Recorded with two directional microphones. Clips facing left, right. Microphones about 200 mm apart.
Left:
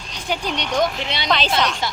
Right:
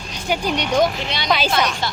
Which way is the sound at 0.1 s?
5° right (ahead or behind).